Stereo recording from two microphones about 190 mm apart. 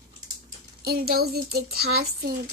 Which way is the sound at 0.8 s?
55° right (ahead or behind).